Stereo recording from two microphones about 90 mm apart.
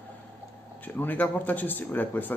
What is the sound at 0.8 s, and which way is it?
Speech, 20° left (ahead or behind).